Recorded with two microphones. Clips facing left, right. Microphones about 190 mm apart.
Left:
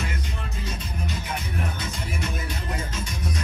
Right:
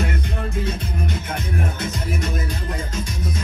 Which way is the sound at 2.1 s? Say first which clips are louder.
Right 5 dB; 40° right (ahead or behind).